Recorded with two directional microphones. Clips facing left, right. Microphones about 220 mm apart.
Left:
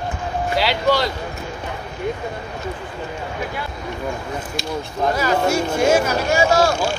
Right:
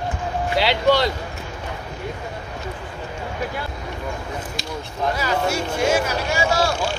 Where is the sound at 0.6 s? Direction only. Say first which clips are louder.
Right 1 dB; 25° right (ahead or behind).